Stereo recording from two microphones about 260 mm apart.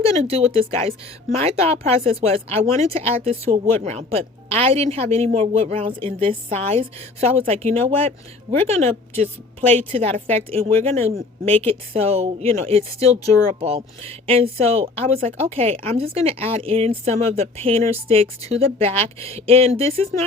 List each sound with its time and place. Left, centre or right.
0.1 s a woman's voice: right